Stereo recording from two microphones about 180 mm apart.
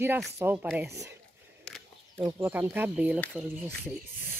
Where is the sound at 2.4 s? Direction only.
10° right (ahead or behind).